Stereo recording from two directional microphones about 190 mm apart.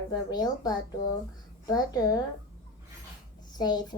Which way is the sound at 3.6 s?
20° left (ahead or behind).